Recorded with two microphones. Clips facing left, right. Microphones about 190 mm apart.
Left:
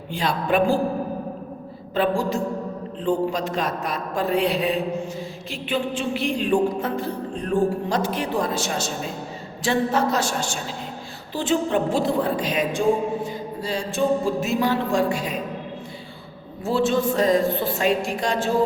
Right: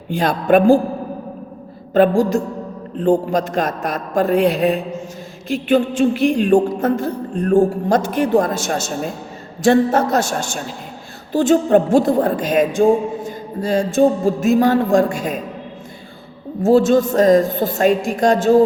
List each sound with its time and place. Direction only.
0.1 s speech: 45° right (ahead or behind)
1.9 s speech: 45° right (ahead or behind)
16.6 s speech: 45° right (ahead or behind)